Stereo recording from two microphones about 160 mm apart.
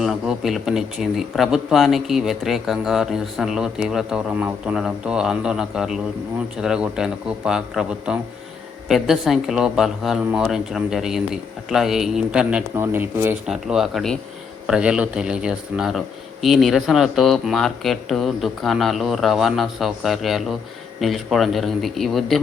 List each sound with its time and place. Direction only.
0.0 s speech: centre (ahead or behind)
13.5 s speech: 5° right (ahead or behind)